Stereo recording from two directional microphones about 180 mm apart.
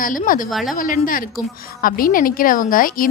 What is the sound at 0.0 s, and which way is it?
A woman's voice, 50° left (ahead or behind).